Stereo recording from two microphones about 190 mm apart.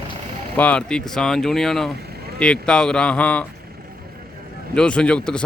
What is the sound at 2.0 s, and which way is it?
Boat, 55° right (ahead or behind).